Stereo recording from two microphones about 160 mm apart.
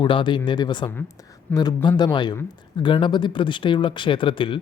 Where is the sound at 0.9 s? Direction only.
15° left (ahead or behind).